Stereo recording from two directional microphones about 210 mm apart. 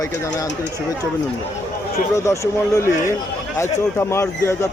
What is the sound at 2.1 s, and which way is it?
Speech, 15° left (ahead or behind).